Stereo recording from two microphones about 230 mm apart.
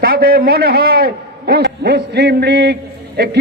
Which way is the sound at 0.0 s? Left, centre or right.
Right.